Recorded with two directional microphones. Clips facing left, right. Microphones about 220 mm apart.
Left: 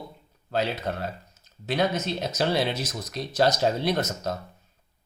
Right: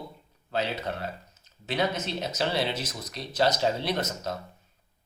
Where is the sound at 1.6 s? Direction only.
45° left (ahead or behind).